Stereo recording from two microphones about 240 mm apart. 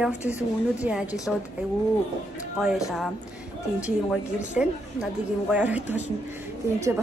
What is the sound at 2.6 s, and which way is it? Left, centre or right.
A woman's voice, centre.